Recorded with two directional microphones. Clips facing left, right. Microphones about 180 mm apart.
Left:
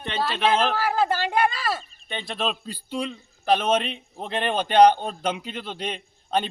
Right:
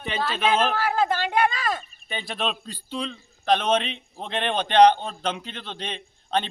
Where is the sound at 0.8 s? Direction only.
5° left (ahead or behind).